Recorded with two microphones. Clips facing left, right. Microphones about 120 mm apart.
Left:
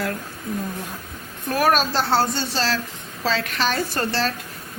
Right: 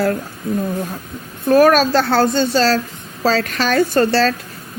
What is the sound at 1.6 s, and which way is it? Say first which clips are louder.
A woman's voice: right 6 dB; 50° right (ahead or behind).